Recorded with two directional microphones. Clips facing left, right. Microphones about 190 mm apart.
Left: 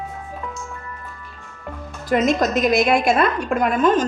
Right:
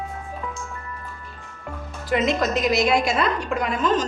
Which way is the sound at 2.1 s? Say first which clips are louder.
Left 3 dB; 45° left (ahead or behind).